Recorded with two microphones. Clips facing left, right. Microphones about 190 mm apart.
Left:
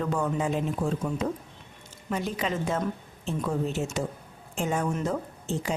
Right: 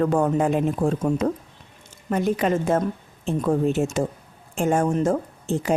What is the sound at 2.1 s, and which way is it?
Speech, 55° right (ahead or behind).